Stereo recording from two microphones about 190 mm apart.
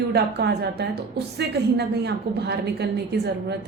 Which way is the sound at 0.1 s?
60° right (ahead or behind).